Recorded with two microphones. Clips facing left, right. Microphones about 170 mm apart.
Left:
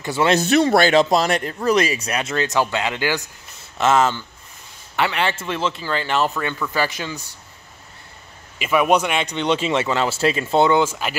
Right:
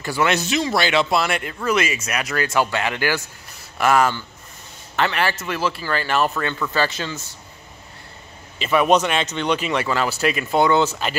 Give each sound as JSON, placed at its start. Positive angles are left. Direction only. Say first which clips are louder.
{"t": 0.0, "sound": "speech", "louder": "left 2 dB", "side_deg": 25}
{"t": 0.4, "sound": "a man's voice", "louder": "left 6 dB", "side_deg": 55}
{"t": 5.3, "sound": "speech", "louder": "even", "side_deg": 25}
{"t": 8.5, "sound": "speech", "louder": "even", "side_deg": 10}
{"t": 10.7, "sound": "speech", "louder": "even", "side_deg": 10}